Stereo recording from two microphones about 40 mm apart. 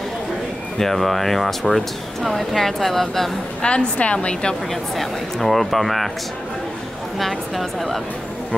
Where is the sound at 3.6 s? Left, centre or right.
Left.